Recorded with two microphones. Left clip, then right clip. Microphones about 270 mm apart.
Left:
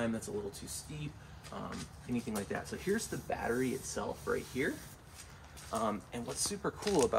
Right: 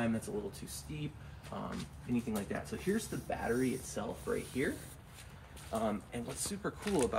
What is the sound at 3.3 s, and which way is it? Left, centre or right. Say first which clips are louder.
Speech: left 1 dB; centre.